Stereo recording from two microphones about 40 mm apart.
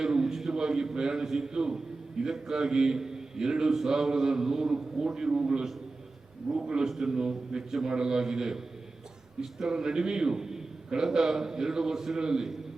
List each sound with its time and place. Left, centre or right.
0.0 s a sound: centre
0.5 s a man's voice: centre
6.8 s a man's voice: centre